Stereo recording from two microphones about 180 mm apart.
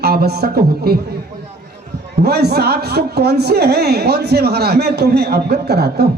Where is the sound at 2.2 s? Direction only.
60° right (ahead or behind).